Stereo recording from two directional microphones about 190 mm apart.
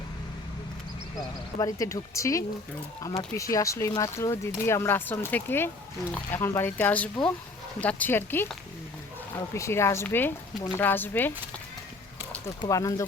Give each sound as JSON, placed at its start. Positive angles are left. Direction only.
{"t": 1.1, "sound": "a woman's voice", "side_deg": 20}
{"t": 9.6, "sound": "a woman's voice", "side_deg": 15}
{"t": 12.6, "sound": "a woman's voice", "side_deg": 15}